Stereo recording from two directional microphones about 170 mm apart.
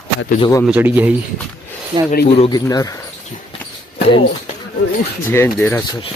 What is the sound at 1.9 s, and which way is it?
Speech, 30° right (ahead or behind).